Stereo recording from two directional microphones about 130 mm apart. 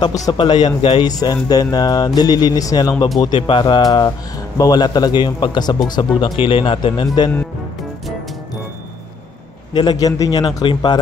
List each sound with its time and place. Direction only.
0.3 s speech: 35° left (ahead or behind)
3.2 s speech: 40° left (ahead or behind)
9.8 s speech: 30° left (ahead or behind)